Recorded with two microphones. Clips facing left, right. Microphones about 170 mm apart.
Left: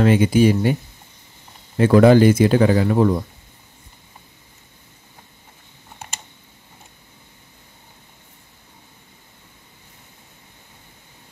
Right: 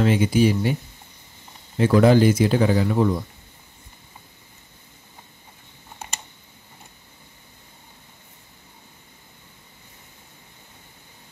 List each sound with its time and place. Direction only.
0.0 s speech: 60° left (ahead or behind)
1.8 s speech: 65° left (ahead or behind)